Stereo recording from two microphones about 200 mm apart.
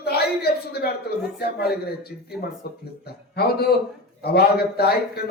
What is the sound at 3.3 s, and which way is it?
A man's voice, 50° left (ahead or behind).